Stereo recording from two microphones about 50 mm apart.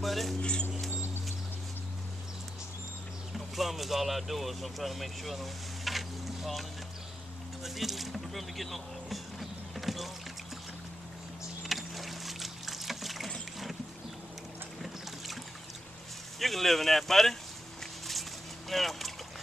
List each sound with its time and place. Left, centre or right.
0.0 s speech: centre
0.4 s speech: centre
3.3 s speech: centre
7.6 s music: centre
11.6 s boat: centre
16.3 s speech: centre
18.7 s boat: centre